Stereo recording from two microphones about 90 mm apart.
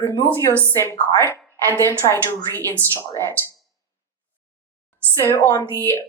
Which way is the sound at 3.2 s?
35° right (ahead or behind).